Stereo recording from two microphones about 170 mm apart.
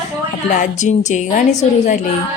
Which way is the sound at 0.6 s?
45° left (ahead or behind).